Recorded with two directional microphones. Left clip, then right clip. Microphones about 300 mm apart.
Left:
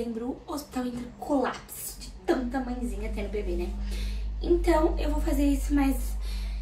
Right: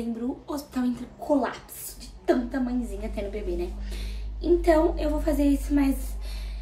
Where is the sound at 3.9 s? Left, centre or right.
Centre.